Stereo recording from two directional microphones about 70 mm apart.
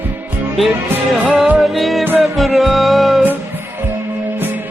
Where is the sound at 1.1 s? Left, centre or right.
Centre.